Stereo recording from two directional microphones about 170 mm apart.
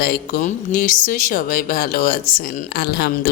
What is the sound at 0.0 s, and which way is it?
Speech, 60° left (ahead or behind).